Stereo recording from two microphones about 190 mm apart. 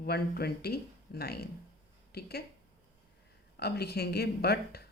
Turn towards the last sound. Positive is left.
turn(degrees=55)  # may be behind; listen again after turning